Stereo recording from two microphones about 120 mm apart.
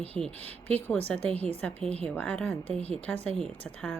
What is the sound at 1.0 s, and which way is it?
A woman's voice, 15° left (ahead or behind).